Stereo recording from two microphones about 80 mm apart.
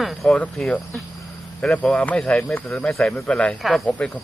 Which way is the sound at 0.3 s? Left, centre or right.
Centre.